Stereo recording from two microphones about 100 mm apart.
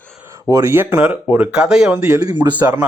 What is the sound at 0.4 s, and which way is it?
Speech, 30° right (ahead or behind).